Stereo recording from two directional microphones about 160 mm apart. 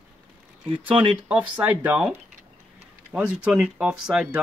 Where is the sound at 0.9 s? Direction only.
35° right (ahead or behind).